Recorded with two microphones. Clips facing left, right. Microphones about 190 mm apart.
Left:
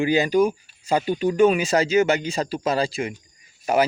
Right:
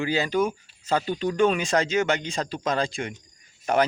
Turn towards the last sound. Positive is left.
turn(degrees=5)  # may be behind; listen again after turning